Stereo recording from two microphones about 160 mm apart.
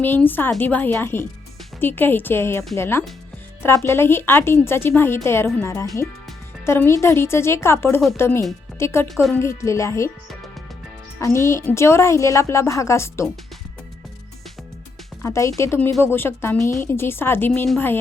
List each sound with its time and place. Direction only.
0.0 s a woman's voice: 10° left (ahead or behind)
11.2 s a woman's voice: 15° left (ahead or behind)
15.2 s a woman's voice: 20° left (ahead or behind)